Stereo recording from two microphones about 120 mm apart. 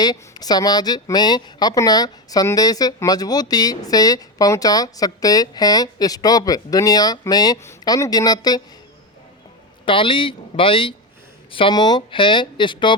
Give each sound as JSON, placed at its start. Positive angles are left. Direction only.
{"t": 0.0, "sound": "speech", "side_deg": 35}
{"t": 9.8, "sound": "speech", "side_deg": 45}